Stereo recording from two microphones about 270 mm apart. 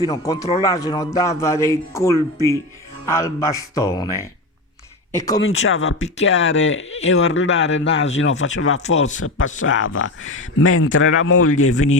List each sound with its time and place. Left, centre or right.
0.0 s a man's voice: centre
5.4 s speech: left